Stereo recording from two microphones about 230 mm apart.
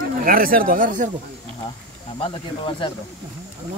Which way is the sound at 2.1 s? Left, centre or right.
Left.